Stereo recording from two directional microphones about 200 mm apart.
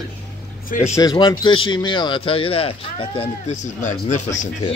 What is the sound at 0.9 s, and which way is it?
Speech, 20° left (ahead or behind).